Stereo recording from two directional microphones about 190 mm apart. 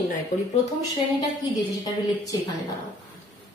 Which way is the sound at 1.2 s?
20° left (ahead or behind).